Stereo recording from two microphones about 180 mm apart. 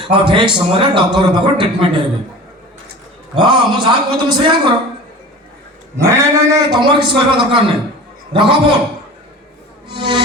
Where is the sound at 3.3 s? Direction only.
25° right (ahead or behind).